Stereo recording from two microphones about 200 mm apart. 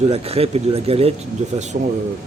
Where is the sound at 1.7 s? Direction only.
45° right (ahead or behind).